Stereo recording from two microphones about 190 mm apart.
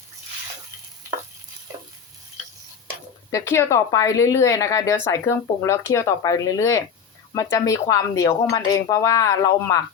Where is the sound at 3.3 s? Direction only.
15° left (ahead or behind).